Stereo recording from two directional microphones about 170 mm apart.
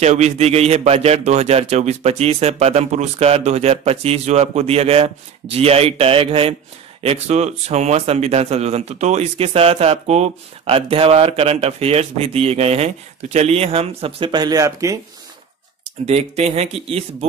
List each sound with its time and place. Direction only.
0.0 s speech: 40° right (ahead or behind); by 15.0 s 20° right (ahead or behind)
16.1 s speech: 40° right (ahead or behind)